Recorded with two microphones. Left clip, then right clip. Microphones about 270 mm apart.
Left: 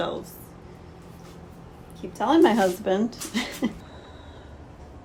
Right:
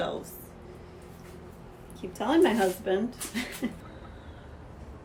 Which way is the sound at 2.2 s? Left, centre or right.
Centre.